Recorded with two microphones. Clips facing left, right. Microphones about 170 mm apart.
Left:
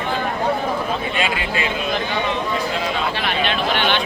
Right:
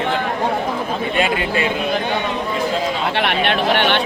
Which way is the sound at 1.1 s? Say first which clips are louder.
Right 4 dB; 50° right (ahead or behind).